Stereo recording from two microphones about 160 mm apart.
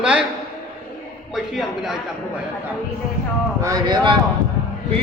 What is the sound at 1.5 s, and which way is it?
Speech, centre (ahead or behind).